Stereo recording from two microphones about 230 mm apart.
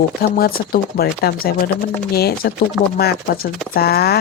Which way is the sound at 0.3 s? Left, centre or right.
Left.